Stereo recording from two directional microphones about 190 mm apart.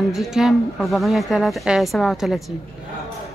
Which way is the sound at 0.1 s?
Centre (ahead or behind).